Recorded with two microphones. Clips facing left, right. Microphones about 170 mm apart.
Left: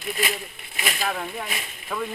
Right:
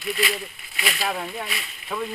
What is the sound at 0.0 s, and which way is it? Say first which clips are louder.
Speech: right 2 dB; 45° left (ahead or behind).